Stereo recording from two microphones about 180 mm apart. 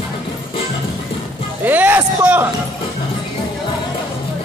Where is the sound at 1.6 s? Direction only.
10° right (ahead or behind).